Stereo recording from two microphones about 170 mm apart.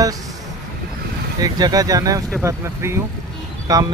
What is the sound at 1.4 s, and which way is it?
Speech, 20° right (ahead or behind).